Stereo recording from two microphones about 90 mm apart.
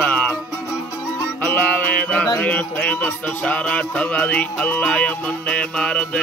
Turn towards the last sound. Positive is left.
turn(degrees=15)  # may be behind; listen again after turning